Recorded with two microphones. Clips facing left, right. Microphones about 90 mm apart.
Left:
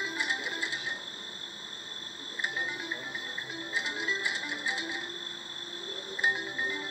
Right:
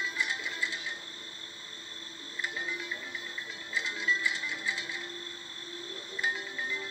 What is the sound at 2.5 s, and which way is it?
Music, 25° left (ahead or behind).